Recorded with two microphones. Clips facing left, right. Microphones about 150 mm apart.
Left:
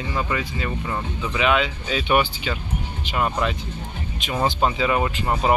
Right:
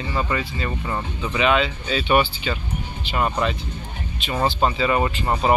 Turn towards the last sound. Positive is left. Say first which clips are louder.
# right 1 dB
turn(degrees=5)  # may be behind; listen again after turning